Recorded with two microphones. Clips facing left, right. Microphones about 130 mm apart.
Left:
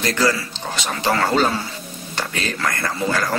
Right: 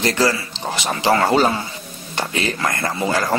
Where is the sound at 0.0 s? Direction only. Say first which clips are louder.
Right 1 dB; 30° right (ahead or behind).